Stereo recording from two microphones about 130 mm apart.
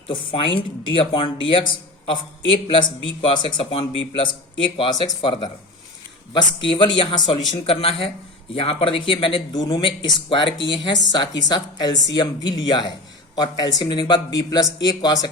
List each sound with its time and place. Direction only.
0.1 s speech: 40° left (ahead or behind)